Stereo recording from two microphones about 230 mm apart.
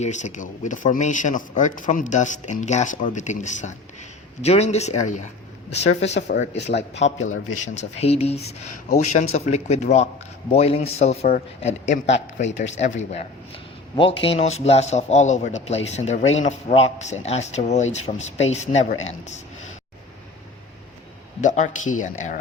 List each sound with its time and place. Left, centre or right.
0.0 s a man's voice: left
6.1 s speech: left
7.2 s a man's voice: left
7.5 s a man's voice: left
21.4 s speech: left